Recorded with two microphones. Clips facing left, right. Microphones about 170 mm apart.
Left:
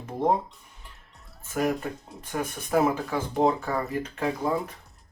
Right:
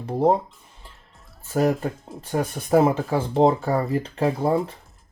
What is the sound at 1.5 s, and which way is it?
Speech, 35° right (ahead or behind).